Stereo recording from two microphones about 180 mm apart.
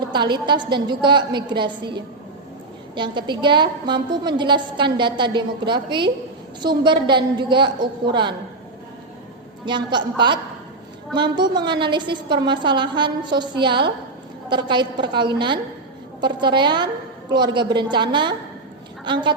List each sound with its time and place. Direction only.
0.1 s a woman's voice: 25° right (ahead or behind)
9.6 s a woman's voice: 25° right (ahead or behind)